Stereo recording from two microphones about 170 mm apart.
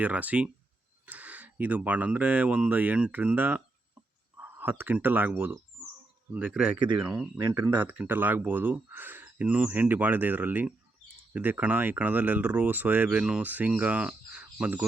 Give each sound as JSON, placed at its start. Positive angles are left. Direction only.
{"t": 0.0, "sound": "speech", "side_deg": -10}
{"t": 7.4, "sound": "speech", "side_deg": -20}
{"t": 7.8, "sound": "speech", "side_deg": -10}